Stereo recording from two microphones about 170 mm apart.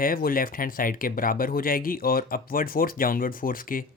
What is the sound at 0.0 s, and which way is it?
Speech, 55° left (ahead or behind).